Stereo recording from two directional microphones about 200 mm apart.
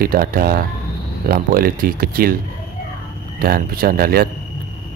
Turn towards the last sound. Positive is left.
turn(degrees=-45)  # may be behind; listen again after turning